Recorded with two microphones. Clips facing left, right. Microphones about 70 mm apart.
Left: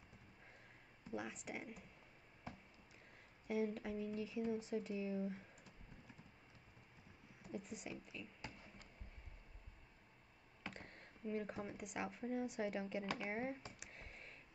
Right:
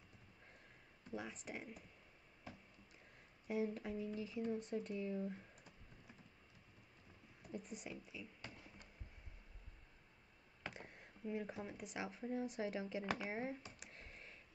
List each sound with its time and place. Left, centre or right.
1.1 s speech: centre
3.4 s speech: centre
7.4 s speech: centre
10.6 s speech: centre
13.7 s a sound: centre